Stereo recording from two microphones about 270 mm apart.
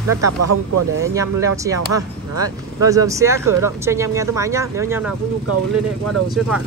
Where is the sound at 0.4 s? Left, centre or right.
Right.